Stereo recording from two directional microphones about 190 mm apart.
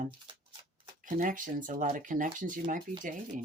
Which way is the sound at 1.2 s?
45° right (ahead or behind).